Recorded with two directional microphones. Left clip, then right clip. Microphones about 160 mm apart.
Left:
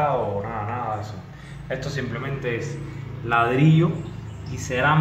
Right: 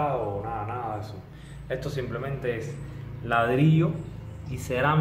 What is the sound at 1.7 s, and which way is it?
Speech, 25° right (ahead or behind).